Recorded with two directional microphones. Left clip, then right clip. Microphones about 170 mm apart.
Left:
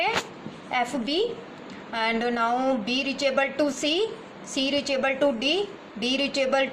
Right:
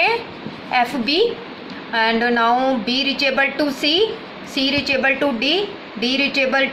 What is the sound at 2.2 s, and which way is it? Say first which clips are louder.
A woman's voice: right 8 dB; 50° left (ahead or behind).